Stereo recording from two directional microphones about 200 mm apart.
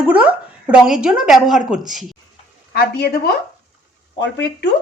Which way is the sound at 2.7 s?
50° left (ahead or behind).